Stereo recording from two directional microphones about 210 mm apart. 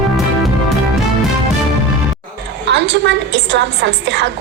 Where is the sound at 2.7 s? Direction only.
55° right (ahead or behind).